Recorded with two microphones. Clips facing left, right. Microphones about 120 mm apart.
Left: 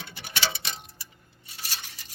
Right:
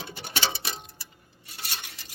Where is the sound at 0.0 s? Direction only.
25° right (ahead or behind).